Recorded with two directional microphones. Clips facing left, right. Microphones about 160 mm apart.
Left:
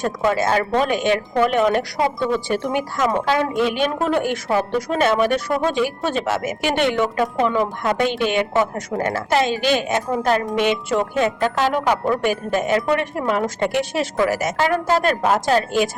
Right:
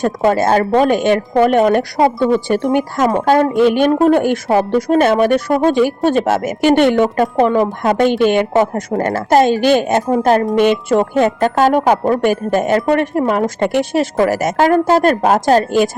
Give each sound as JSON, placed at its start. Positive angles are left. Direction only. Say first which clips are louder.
{"t": 0.0, "sound": "speech", "louder": "right 6 dB", "side_deg": -45}